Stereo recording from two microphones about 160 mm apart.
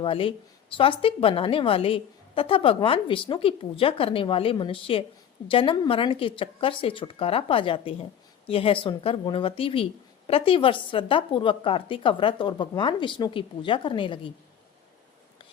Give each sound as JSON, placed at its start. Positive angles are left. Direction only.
{"t": 0.0, "sound": "speech", "side_deg": 35}